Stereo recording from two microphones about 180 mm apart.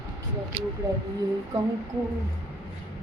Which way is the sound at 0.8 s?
20° right (ahead or behind).